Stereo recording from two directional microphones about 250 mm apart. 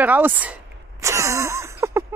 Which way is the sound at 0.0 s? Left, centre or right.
Centre.